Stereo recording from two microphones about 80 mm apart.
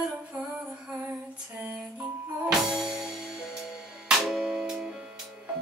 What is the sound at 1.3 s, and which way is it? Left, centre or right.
Lullaby, centre.